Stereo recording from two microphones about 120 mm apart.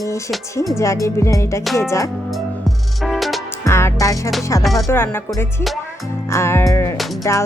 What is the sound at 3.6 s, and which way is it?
Music, 20° left (ahead or behind).